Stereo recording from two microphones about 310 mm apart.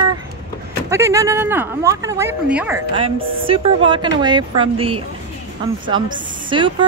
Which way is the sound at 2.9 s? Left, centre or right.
Centre.